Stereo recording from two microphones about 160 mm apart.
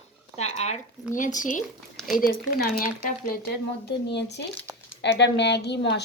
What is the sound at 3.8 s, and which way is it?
A woman's voice, 90° left.